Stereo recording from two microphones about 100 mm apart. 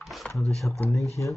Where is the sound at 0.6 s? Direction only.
15° left (ahead or behind).